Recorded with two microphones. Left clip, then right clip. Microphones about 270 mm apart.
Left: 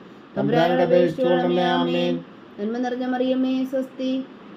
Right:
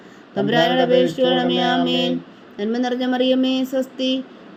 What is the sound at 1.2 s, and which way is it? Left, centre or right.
Speech, right.